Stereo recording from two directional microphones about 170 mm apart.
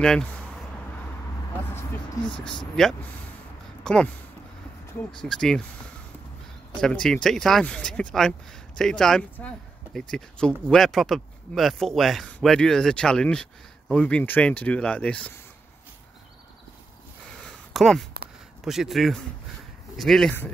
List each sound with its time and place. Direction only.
0.0 s speech: 5° left (ahead or behind)
2.4 s speech: 5° left (ahead or behind)
6.8 s speech: 5° left (ahead or behind)
17.4 s a sound: centre (ahead or behind)
18.6 s speech: centre (ahead or behind)